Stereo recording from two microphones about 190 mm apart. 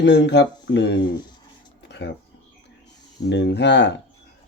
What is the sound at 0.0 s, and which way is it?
Speech, 65° left (ahead or behind).